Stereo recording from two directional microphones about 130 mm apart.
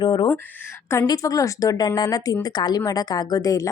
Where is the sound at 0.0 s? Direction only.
35° left (ahead or behind).